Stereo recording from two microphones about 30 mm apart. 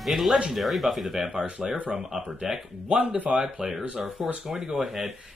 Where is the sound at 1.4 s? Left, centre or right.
Right.